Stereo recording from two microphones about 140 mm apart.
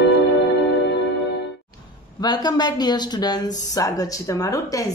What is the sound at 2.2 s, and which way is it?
A woman's voice, 30° left (ahead or behind).